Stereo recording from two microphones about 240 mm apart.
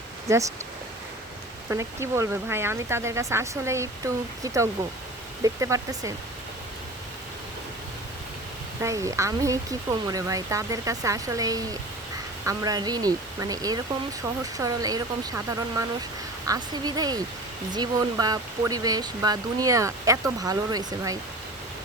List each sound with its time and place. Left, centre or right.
0.3 s speech: centre
1.7 s speech: centre
8.8 s speech: centre